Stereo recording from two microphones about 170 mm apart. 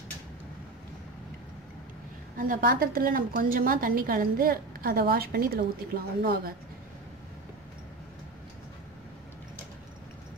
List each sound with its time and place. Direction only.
2.3 s a woman's voice: 55° right (ahead or behind)